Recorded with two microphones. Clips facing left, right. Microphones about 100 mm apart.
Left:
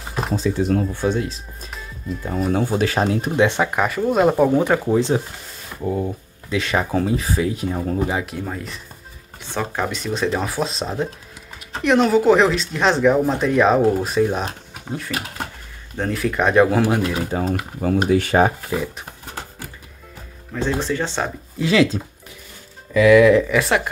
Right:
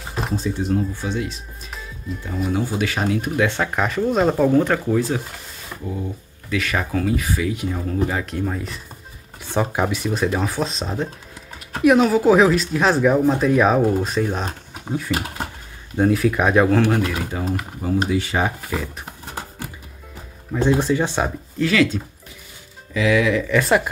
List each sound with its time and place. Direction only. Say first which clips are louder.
1.0 s speech: left 4 dB; 40° left (ahead or behind)
3.4 s speech: left 3 dB; 15° left (ahead or behind)
3.7 s speech: left 1 dB; 5° left (ahead or behind); by 5.2 s 20° left (ahead or behind)
6.5 s speech: left 2 dB; 25° left (ahead or behind)
8.1 s speech: left 1 dB; 15° left (ahead or behind)
8.4 s speech: right 3 dB; centre (ahead or behind)
9.4 s speech: right 3 dB; 15° right (ahead or behind); by 17.2 s 15° left (ahead or behind)
17.3 s speech: left 3 dB; 40° left (ahead or behind)
17.8 s speech: left 3 dB; 55° left (ahead or behind)
20.5 s speech: right 4 dB; 15° right (ahead or behind)
21.5 s speech: left 1 dB; 20° left (ahead or behind)
22.9 s speech: left 7 dB; 55° left (ahead or behind)
23.5 s speech: right 1 dB; centre (ahead or behind)